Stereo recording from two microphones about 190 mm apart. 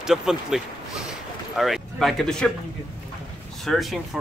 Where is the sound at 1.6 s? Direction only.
Centre (ahead or behind).